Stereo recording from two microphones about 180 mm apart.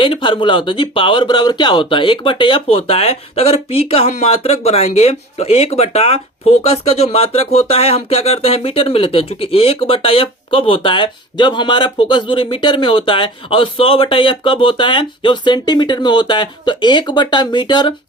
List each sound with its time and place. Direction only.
0.0 s speech: 25° left (ahead or behind)